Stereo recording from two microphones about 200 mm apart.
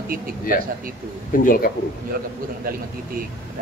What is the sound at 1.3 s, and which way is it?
Speech, 45° left (ahead or behind).